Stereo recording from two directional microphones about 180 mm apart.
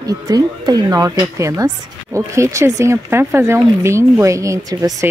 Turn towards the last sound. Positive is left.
turn(degrees=-20)  # may be behind; listen again after turning